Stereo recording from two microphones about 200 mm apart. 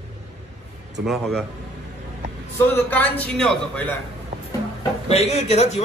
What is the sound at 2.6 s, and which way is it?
A man's voice, 10° left (ahead or behind).